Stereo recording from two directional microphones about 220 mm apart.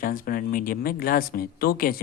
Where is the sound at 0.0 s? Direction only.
40° left (ahead or behind).